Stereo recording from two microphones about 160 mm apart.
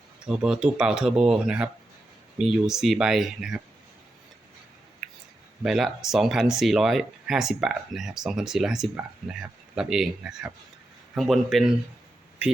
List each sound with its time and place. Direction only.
0.3 s speech: 5° right (ahead or behind)
5.0 s clicking: centre (ahead or behind)
5.6 s speech: centre (ahead or behind)